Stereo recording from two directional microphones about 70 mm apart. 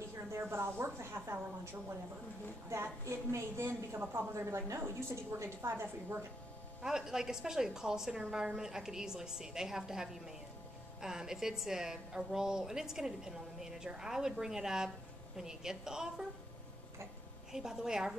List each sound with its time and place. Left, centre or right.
0.1 s a woman's voice: right
6.8 s a woman's voice: centre
17.5 s a woman's voice: centre